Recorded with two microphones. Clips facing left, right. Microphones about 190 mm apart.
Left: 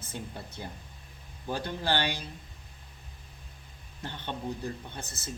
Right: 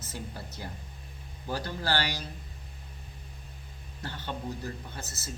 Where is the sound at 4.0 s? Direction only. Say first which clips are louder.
Even; 20° left (ahead or behind).